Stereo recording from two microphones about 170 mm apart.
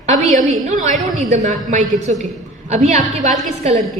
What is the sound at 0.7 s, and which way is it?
A woman's voice, 45° right (ahead or behind).